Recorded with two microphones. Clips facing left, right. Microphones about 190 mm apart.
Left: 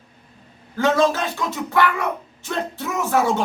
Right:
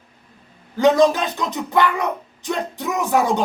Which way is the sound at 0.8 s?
15° right (ahead or behind).